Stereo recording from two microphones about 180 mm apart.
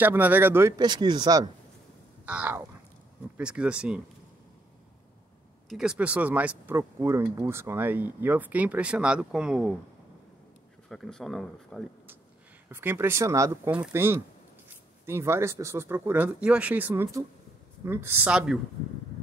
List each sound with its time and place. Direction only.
0.0 s speech: 10° right (ahead or behind)
2.2 s speech: 10° right (ahead or behind)
5.7 s speech: 5° right (ahead or behind)
10.9 s speech: centre (ahead or behind)
12.6 s speech: 15° right (ahead or behind)